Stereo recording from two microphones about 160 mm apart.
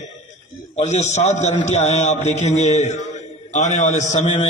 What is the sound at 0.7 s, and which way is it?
A man's voice, 45° left (ahead or behind).